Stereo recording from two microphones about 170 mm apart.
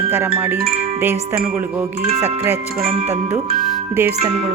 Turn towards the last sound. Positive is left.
turn(degrees=-10)  # may be behind; listen again after turning